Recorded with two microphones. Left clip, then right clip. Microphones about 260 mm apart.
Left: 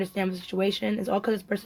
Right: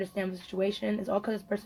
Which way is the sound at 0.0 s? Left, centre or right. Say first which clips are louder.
Left 4 dB; left.